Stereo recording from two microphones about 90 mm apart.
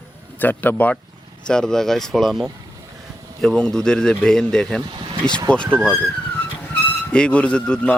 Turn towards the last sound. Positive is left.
turn(degrees=10)  # may be behind; listen again after turning